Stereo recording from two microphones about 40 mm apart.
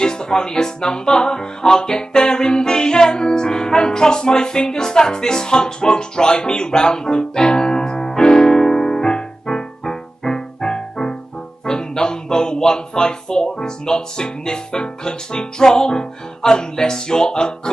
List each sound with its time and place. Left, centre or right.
0.0 s speech: centre